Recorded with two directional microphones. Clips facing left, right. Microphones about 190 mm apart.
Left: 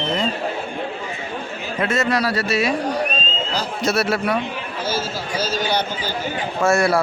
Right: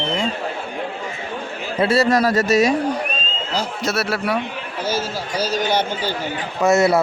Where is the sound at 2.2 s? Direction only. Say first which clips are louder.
Right 5 dB; 45° right (ahead or behind).